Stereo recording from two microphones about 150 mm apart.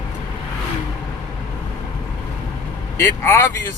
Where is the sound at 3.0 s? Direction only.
20° left (ahead or behind).